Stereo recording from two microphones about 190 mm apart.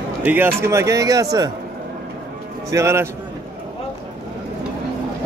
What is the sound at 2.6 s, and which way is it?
Speech, 15° right (ahead or behind).